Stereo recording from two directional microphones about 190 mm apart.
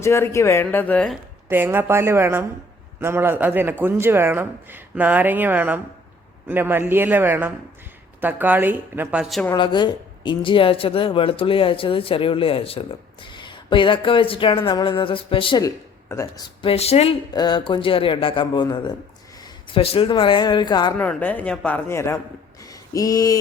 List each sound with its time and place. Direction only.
0.0 s speech: 15° left (ahead or behind)
1.5 s speech: 10° right (ahead or behind)
9.6 s speech: 25° left (ahead or behind)
16.6 s speech: 30° left (ahead or behind)
17.3 s speech: 20° left (ahead or behind)
21.0 s speech: 10° left (ahead or behind)
22.7 s a sound: 20° left (ahead or behind)